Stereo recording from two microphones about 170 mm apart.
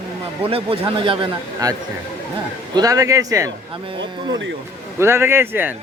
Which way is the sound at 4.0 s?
90° right.